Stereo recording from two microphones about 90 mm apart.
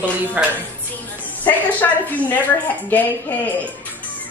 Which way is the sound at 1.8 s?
25° left (ahead or behind).